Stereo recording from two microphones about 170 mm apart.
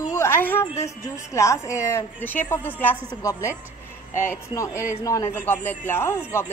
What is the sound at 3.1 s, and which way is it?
A woman's voice, 20° left (ahead or behind).